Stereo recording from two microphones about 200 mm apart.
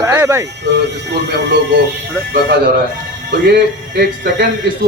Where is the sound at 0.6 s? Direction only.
60° right (ahead or behind).